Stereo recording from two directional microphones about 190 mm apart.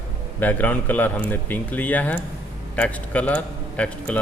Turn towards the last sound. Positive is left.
turn(degrees=5)  # may be behind; listen again after turning